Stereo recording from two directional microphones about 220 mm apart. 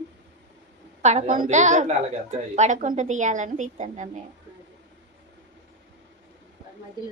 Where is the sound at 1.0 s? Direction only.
35° right (ahead or behind).